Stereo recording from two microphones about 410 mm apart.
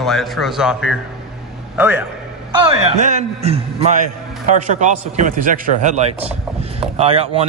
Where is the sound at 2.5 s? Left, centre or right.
Centre.